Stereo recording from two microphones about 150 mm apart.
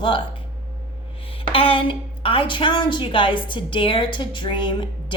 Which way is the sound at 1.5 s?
35° left (ahead or behind).